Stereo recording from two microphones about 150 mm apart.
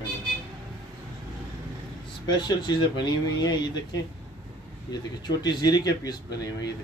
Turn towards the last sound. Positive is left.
turn(degrees=25)  # may be behind; listen again after turning